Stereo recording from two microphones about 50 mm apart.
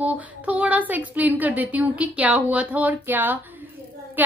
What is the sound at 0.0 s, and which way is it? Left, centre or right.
A woman's voice, right.